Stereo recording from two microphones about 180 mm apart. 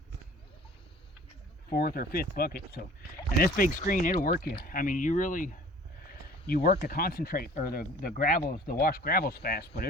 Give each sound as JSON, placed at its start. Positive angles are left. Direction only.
{"t": 1.7, "sound": "speech", "side_deg": 60}
{"t": 6.5, "sound": "speech", "side_deg": 55}